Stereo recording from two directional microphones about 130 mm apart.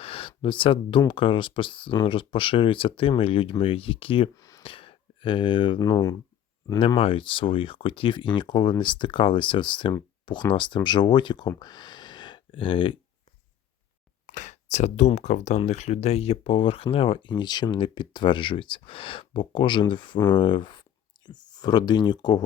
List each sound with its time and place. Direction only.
0.0 s speech: 45° left (ahead or behind)
4.4 s a sound: 25° left (ahead or behind)
4.6 s speech: 45° left (ahead or behind)
5.8 s speech: 25° left (ahead or behind)
6.7 s speech: 45° left (ahead or behind)
14.3 s speech: 75° left (ahead or behind); by 22.4 s 30° left (ahead or behind)